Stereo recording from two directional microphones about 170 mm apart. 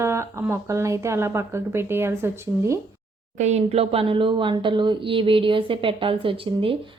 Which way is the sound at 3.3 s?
40° right (ahead or behind).